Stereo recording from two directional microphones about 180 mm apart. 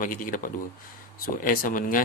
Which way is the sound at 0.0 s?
50° left (ahead or behind).